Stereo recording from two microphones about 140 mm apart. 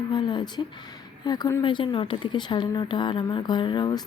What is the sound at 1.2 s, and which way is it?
Speech, 30° left (ahead or behind).